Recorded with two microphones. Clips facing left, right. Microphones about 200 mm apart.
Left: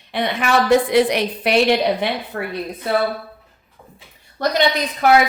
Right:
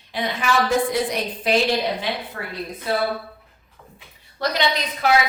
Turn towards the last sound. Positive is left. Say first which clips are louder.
# left 5 dB
turn(degrees=50)  # may be behind; listen again after turning